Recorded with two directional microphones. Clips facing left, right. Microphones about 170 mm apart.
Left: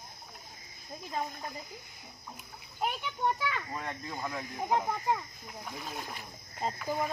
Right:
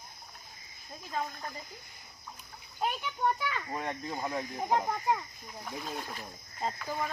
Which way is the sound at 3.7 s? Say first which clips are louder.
Right 3 dB; 25° right (ahead or behind).